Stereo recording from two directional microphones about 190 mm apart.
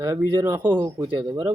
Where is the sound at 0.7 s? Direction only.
10° right (ahead or behind).